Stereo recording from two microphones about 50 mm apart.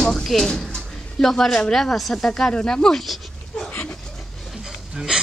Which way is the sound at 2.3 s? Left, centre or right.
Centre.